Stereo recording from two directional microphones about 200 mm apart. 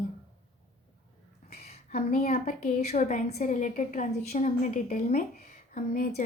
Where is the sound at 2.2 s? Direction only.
40° left (ahead or behind).